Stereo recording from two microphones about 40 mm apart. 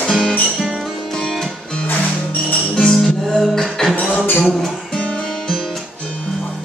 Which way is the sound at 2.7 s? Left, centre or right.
Centre.